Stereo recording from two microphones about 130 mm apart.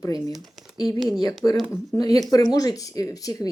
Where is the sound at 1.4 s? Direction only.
20° left (ahead or behind).